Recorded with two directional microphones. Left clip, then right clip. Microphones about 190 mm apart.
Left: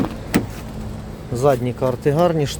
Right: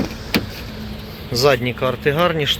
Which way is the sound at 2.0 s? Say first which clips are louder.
Right 1 dB; 25° left (ahead or behind).